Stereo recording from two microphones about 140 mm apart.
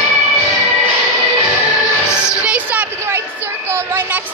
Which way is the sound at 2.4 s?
10° right (ahead or behind).